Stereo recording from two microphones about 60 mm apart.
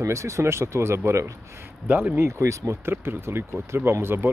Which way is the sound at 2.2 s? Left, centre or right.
Right.